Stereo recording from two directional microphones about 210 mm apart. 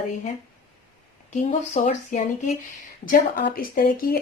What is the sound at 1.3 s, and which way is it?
Speech, 30° left (ahead or behind).